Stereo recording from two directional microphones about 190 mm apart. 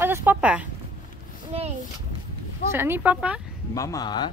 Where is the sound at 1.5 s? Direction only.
30° right (ahead or behind).